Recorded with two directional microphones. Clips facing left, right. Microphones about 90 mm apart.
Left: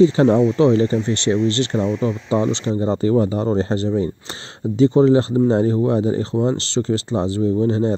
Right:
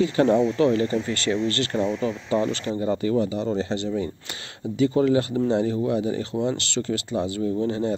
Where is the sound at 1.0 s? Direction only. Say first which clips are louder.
Left 6 dB; 25° left (ahead or behind).